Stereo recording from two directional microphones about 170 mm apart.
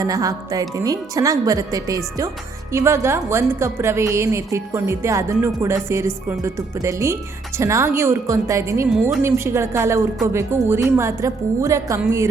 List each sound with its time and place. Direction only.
0.0 s a woman's voice: 20° right (ahead or behind)